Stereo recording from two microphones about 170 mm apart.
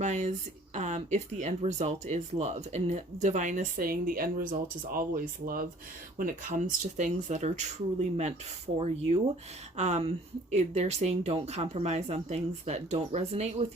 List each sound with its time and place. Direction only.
0.0 s speech: 40° right (ahead or behind)